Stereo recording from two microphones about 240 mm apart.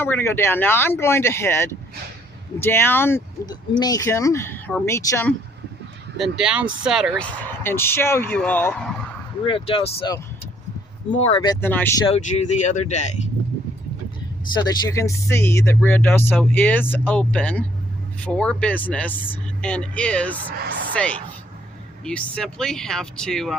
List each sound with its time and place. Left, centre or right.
0.0 s speech: centre
6.1 s speech: centre
9.4 s speech: left
11.6 s speech: centre
12.0 s speech: left
14.5 s speech: centre